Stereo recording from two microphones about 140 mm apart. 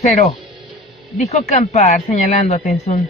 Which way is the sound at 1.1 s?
55° left (ahead or behind).